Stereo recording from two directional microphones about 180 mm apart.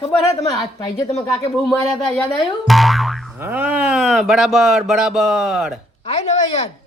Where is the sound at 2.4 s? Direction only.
Centre (ahead or behind).